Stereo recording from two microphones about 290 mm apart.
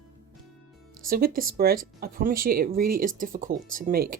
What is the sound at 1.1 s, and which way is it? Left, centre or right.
Speech, right.